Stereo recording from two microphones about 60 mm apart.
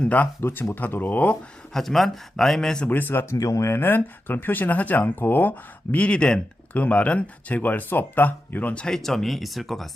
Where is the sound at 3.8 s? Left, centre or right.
Left.